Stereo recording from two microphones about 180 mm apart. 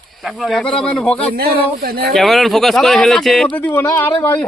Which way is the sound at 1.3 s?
60° right (ahead or behind).